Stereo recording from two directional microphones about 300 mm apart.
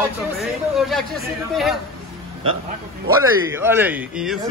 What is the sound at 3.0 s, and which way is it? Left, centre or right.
A man's voice, centre.